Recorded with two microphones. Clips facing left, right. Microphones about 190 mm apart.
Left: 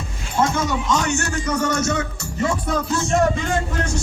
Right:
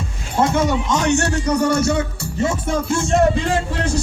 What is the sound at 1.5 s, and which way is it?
Music, 10° right (ahead or behind).